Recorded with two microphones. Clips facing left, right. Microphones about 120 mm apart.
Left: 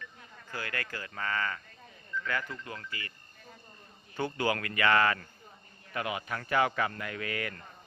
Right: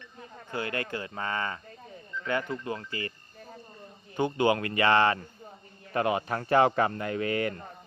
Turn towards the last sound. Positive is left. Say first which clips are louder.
# right 8 dB
turn(degrees=-30)  # may be behind; listen again after turning